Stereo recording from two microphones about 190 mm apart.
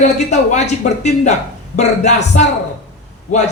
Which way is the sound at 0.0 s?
35° left (ahead or behind).